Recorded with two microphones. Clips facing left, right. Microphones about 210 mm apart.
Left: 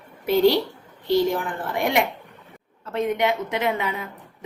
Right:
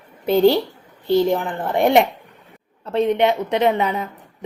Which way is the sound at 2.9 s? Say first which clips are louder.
Right 5 dB; 30° right (ahead or behind).